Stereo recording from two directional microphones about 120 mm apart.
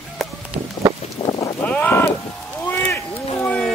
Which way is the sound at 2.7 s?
20° left (ahead or behind).